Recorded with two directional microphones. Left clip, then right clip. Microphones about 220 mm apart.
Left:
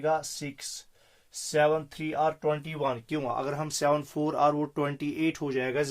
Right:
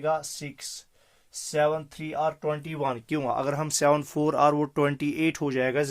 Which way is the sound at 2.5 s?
30° right (ahead or behind).